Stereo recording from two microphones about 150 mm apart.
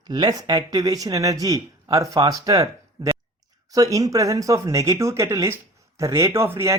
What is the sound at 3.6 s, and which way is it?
Speech, 25° right (ahead or behind).